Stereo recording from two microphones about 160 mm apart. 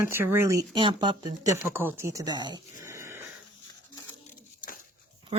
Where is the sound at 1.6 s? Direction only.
15° right (ahead or behind).